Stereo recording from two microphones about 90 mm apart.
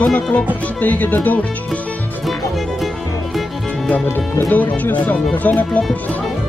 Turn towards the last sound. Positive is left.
turn(degrees=15)  # may be behind; listen again after turning